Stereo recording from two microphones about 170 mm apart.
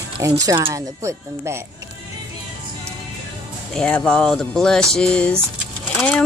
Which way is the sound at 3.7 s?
5° left (ahead or behind).